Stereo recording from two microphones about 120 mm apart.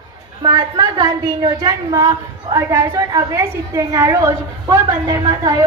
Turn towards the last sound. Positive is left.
turn(degrees=-30)  # may be behind; listen again after turning